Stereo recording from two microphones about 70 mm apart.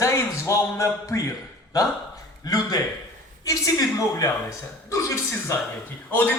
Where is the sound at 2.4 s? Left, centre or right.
Left.